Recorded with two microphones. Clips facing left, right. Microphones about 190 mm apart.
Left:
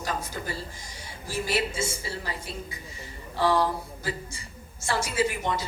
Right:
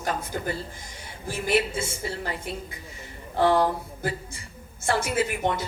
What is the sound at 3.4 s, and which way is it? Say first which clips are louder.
A woman's voice: right 3 dB; 55° right (ahead or behind).